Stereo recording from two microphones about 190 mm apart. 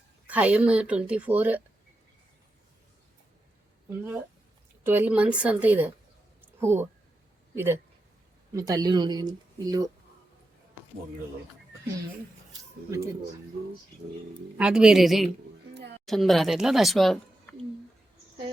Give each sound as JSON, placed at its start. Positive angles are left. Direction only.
{"t": 0.3, "sound": "speech", "side_deg": -5}
{"t": 3.8, "sound": "speech", "side_deg": -10}
{"t": 6.4, "sound": "a sound", "side_deg": -10}
{"t": 7.5, "sound": "speech", "side_deg": -10}
{"t": 14.6, "sound": "speech", "side_deg": -5}
{"t": 15.7, "sound": "a sound", "side_deg": -65}
{"t": 16.0, "sound": "speech", "side_deg": 0}